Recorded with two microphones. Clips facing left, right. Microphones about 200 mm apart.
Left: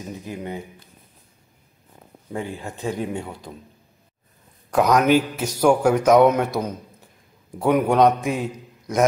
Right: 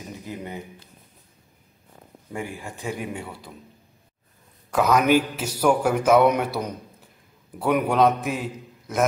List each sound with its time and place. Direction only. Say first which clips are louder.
0.2 s speech: left 2 dB; 15° left (ahead or behind)
2.5 s speech: left 4 dB; 20° left (ahead or behind)
4.7 s a man's voice: left 2 dB; 5° right (ahead or behind)
7.6 s a man's voice: left 3 dB; 5° right (ahead or behind)